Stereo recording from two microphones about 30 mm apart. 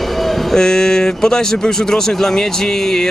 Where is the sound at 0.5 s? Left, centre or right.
Left.